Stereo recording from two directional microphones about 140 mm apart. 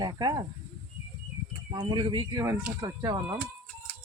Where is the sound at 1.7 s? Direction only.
35° right (ahead or behind).